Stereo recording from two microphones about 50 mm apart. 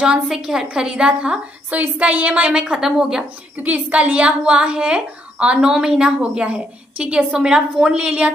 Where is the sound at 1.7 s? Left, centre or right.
Right.